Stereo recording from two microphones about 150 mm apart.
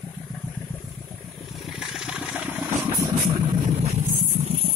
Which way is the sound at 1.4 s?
Centre (ahead or behind).